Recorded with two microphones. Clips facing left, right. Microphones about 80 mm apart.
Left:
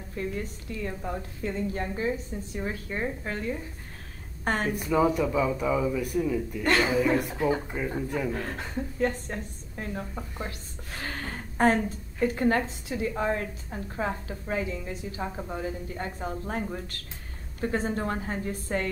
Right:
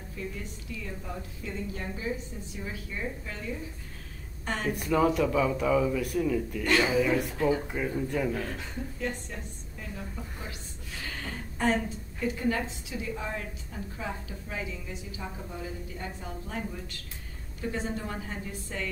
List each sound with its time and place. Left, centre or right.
0.1 s a woman's voice: left
4.7 s a man's voice: centre
6.6 s a woman's voice: left
7.2 s speech: centre
7.7 s a man's voice: centre
8.3 s a woman's voice: left